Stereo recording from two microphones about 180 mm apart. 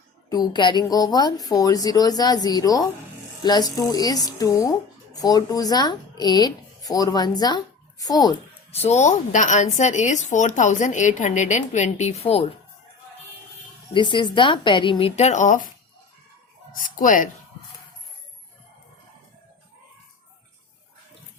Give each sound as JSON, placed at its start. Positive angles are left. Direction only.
{"t": 0.3, "sound": "a woman's voice", "side_deg": 25}
{"t": 8.7, "sound": "a woman's voice", "side_deg": 35}
{"t": 13.9, "sound": "a woman's voice", "side_deg": 25}
{"t": 16.7, "sound": "speech", "side_deg": 50}